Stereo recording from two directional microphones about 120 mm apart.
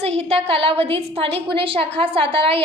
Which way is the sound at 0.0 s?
55° right (ahead or behind).